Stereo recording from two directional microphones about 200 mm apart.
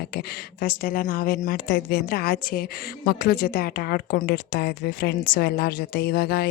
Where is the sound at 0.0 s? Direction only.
50° left (ahead or behind).